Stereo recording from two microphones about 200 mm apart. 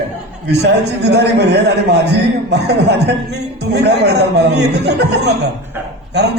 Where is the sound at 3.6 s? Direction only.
55° right (ahead or behind).